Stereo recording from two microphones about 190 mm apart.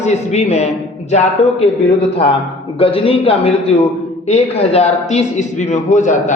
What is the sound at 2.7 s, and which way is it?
A man's voice, 30° left (ahead or behind).